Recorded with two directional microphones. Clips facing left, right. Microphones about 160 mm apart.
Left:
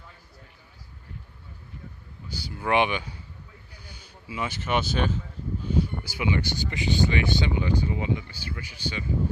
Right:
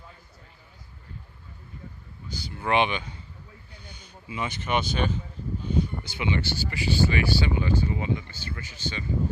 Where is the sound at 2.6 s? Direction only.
15° left (ahead or behind).